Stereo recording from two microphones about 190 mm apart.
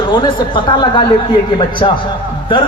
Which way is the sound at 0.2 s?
25° left (ahead or behind).